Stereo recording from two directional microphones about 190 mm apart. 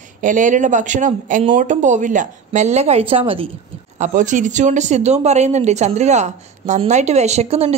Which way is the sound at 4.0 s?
40° right (ahead or behind).